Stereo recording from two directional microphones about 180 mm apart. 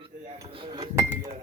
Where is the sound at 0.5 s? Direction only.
25° right (ahead or behind).